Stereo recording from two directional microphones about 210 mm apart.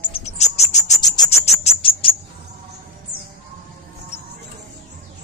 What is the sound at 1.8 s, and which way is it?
Bird, 25° left (ahead or behind).